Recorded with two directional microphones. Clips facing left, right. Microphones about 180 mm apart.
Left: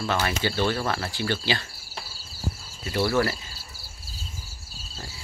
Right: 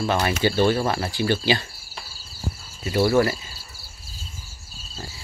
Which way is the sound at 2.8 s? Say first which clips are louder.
Right 5 dB; 15° right (ahead or behind).